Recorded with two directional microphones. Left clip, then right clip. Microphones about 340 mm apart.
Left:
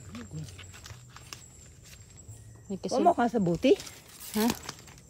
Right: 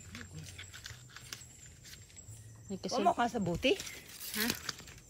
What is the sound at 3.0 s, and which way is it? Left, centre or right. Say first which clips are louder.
Speech: left 6 dB; left.